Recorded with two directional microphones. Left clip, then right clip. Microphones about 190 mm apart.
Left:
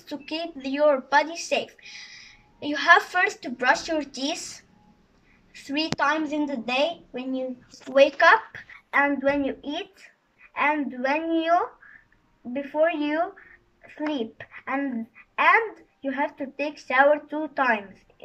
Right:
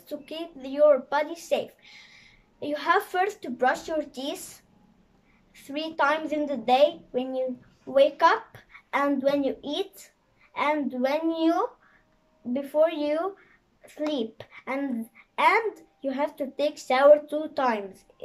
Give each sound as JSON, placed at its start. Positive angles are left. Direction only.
{"t": 0.0, "sound": "a woman's voice", "side_deg": -15}
{"t": 12.6, "sound": "speech", "side_deg": -25}